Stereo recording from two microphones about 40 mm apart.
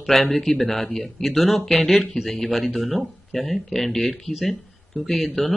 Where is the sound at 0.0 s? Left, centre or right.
Centre.